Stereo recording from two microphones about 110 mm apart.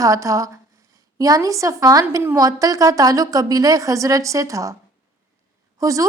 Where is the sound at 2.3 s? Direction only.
35° right (ahead or behind).